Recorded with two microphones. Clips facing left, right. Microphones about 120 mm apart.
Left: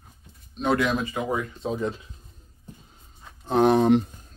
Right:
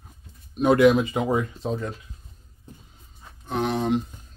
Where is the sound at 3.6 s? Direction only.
55° left (ahead or behind).